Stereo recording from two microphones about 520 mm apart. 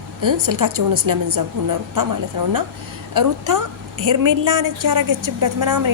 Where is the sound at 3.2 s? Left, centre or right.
Right.